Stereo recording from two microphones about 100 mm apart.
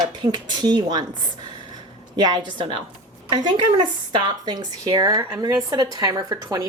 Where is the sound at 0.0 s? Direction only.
45° right (ahead or behind).